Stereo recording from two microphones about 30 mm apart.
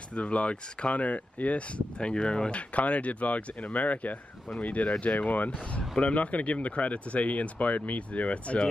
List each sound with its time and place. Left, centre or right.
0.1 s speech: left
0.9 s speech: left
2.0 s speech: left
2.5 s speech: left
5.8 s speech: left
6.1 s speech: left